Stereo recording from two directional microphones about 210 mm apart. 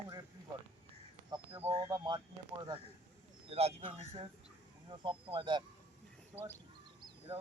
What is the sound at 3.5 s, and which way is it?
Speech, 30° right (ahead or behind).